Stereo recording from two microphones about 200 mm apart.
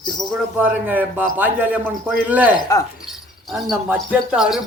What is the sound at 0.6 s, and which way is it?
A man's voice, 10° right (ahead or behind).